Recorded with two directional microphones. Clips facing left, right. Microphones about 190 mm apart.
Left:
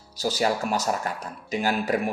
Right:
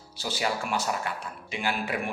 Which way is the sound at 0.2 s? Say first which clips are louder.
Left 6 dB; 40° left (ahead or behind).